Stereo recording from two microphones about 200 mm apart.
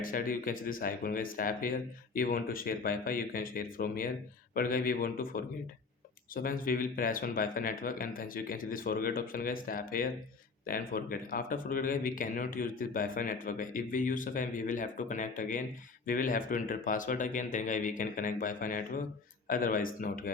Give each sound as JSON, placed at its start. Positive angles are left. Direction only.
{"t": 0.0, "sound": "speech", "side_deg": 45}